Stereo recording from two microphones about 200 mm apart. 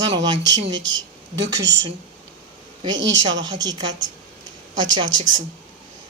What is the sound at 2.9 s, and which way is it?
Speech, 65° right (ahead or behind).